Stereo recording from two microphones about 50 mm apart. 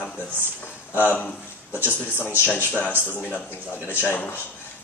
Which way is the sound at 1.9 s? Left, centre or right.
Left.